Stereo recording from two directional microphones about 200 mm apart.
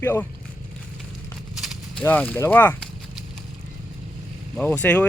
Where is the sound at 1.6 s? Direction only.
5° left (ahead or behind).